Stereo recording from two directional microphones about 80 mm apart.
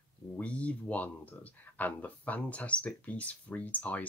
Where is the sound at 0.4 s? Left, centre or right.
Centre.